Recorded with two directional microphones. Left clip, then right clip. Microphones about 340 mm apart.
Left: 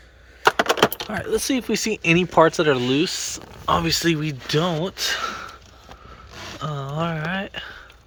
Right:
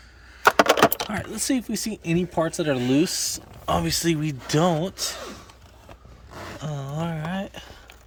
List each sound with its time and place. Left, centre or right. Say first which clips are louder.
0.4 s typing: right 1 dB; centre
1.1 s speech: left 4 dB; centre
6.6 s a sound: left 6 dB; centre